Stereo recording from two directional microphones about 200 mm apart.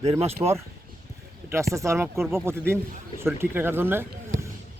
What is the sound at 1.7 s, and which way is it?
A man's voice, 15° right (ahead or behind).